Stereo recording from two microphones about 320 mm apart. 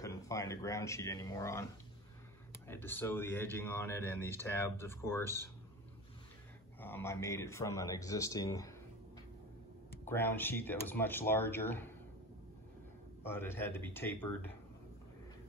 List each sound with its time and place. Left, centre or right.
0.0 s speech: centre
2.7 s speech: centre
6.8 s speech: centre
10.0 s speech: centre
13.3 s speech: centre